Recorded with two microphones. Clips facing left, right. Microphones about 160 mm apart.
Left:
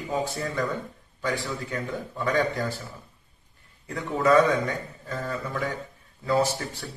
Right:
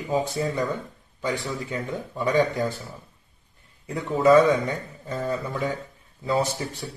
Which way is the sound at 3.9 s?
20° right (ahead or behind).